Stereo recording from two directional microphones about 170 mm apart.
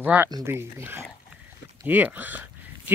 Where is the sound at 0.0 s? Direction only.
10° right (ahead or behind).